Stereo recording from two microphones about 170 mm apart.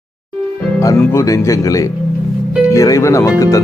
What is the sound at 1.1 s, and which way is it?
Speech, 15° left (ahead or behind).